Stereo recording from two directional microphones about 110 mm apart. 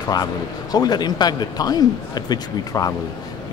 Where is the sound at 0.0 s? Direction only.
35° left (ahead or behind).